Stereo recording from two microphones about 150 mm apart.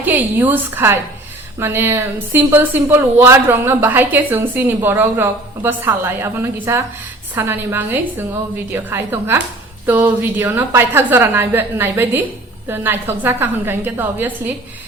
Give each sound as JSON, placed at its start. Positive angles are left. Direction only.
{"t": 0.0, "sound": "a woman's voice", "side_deg": -10}